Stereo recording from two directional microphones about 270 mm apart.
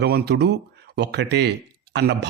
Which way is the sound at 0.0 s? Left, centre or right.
Right.